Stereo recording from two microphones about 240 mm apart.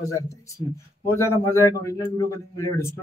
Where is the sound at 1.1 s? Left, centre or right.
Centre.